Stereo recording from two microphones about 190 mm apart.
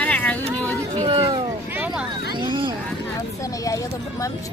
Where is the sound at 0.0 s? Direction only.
5° left (ahead or behind).